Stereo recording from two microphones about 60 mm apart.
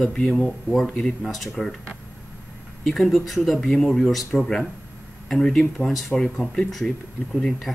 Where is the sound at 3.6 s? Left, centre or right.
Centre.